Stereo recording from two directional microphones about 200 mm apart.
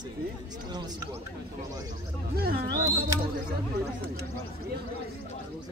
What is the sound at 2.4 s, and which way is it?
Speech, 50° right (ahead or behind).